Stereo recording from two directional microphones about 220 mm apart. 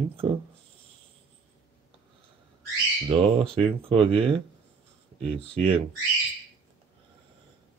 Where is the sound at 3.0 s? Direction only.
25° right (ahead or behind).